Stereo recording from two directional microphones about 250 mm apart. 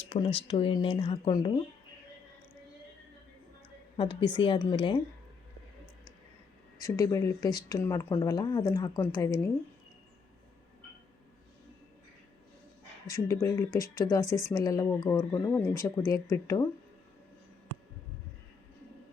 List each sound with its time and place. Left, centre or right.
0.1 s speech: left
3.9 s a woman's voice: centre
6.7 s speech: centre
13.1 s speech: centre